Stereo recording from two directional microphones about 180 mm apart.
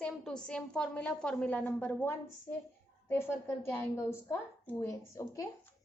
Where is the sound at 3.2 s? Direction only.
15° left (ahead or behind).